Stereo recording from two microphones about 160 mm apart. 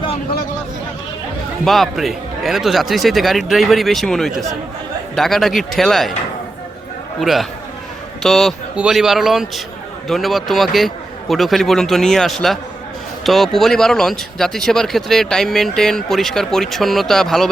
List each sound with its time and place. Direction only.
1.6 s speech: centre (ahead or behind)
7.2 s speech: centre (ahead or behind)